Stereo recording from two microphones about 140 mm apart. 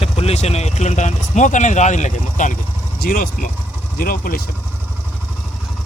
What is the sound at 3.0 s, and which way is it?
Speech, 85° left.